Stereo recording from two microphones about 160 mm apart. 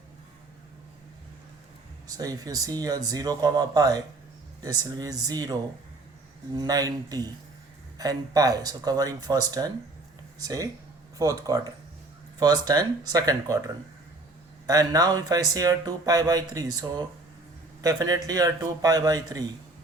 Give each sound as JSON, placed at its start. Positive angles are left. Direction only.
{"t": 2.0, "sound": "speech", "side_deg": -25}